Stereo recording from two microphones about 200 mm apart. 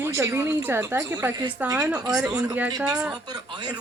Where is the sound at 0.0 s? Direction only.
15° right (ahead or behind).